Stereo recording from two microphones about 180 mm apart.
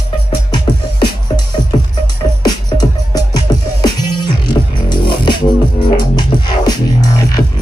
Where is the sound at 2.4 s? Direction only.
20° left (ahead or behind).